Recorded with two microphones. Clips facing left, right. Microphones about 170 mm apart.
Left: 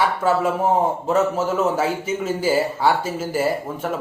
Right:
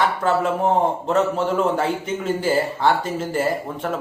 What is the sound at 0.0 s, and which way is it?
A man's voice, 10° left (ahead or behind).